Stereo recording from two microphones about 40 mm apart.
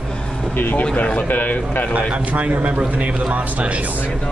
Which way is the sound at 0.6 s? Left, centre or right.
Left.